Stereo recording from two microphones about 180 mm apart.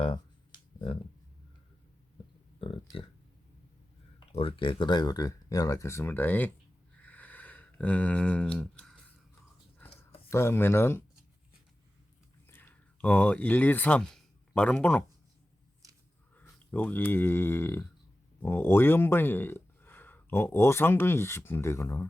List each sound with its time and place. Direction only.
0.0 s a sound: 25° left (ahead or behind)
2.8 s speech: 25° left (ahead or behind)
4.3 s speech: 30° left (ahead or behind); by 6.5 s 10° left (ahead or behind)
7.0 s a sound: 10° left (ahead or behind)
10.2 s speech: 15° left (ahead or behind)
12.5 s speech: 10° left (ahead or behind)
16.3 s speech: 10° left (ahead or behind)